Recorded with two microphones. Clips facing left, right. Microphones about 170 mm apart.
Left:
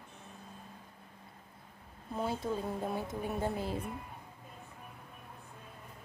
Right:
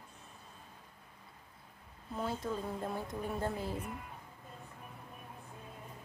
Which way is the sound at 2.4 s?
15° left (ahead or behind).